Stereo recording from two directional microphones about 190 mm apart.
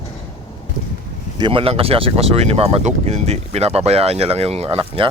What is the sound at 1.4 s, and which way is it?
Speech, 25° right (ahead or behind).